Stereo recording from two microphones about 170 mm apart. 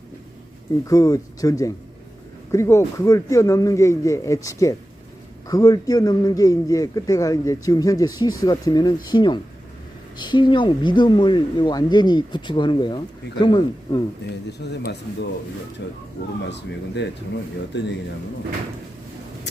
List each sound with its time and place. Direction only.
0.9 s a man's voice: 20° left (ahead or behind)
14.6 s speech: 80° left
15.8 s speech: 90° left